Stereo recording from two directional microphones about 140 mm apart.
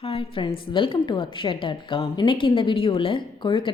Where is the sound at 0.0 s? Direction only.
40° left (ahead or behind).